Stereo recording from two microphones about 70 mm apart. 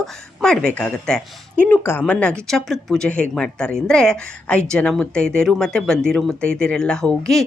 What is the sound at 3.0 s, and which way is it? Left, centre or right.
Speech, centre.